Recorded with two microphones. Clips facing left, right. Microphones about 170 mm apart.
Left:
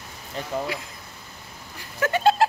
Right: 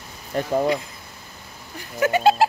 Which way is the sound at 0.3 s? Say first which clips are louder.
Right 7 dB; 50° right (ahead or behind).